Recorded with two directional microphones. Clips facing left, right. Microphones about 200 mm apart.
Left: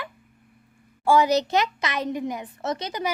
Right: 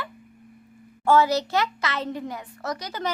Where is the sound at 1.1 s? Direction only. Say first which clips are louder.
Left 1 dB; 15° left (ahead or behind).